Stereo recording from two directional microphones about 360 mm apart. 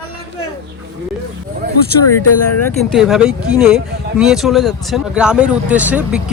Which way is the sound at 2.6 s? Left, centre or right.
Centre.